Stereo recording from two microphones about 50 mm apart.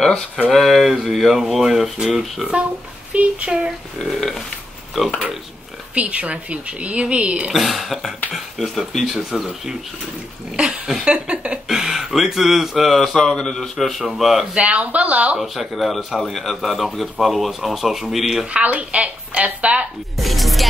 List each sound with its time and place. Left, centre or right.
0.5 s a man's voice: centre
2.6 s speech: right
3.4 s speech: centre
4.2 s a man's voice: centre
5.9 s speech: right
7.5 s a man's voice: centre
10.5 s speech: right
11.6 s speech: centre
13.1 s a man's voice: centre
14.5 s speech: right
15.3 s a man's voice: centre
18.5 s speech: right
20.2 s music: centre